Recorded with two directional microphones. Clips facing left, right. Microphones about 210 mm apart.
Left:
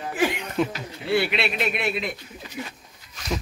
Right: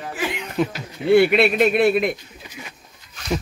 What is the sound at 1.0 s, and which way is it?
A man's voice, 50° right (ahead or behind).